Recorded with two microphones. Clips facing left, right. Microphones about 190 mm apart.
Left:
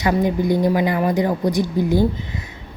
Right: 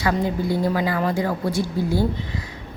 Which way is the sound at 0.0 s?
15° left (ahead or behind).